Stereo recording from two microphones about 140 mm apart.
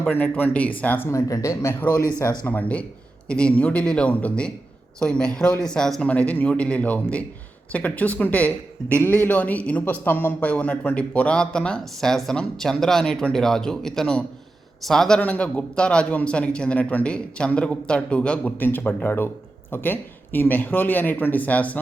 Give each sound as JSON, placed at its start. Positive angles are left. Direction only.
{"t": 0.0, "sound": "a man's voice", "side_deg": 15}
{"t": 2.4, "sound": "a man's voice", "side_deg": 10}